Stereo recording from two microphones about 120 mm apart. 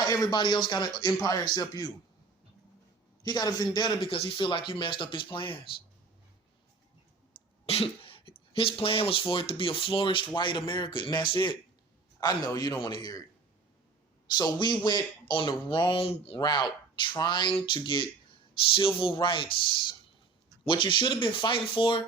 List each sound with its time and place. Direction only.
0.0 s a man's voice: 30° left (ahead or behind)
3.2 s a man's voice: 35° left (ahead or behind)
7.7 s cough: 55° left (ahead or behind)
8.3 s a man's voice: 50° left (ahead or behind); by 13.2 s 35° left (ahead or behind)
14.3 s a man's voice: 35° left (ahead or behind); by 16.4 s 50° left (ahead or behind)
16.4 s a man's voice: 35° left (ahead or behind)